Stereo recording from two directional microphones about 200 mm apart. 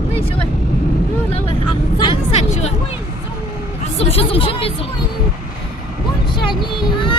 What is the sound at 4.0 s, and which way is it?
Speech, 30° left (ahead or behind).